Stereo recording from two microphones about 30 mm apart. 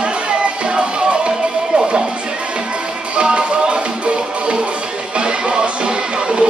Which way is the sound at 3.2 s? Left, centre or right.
Right.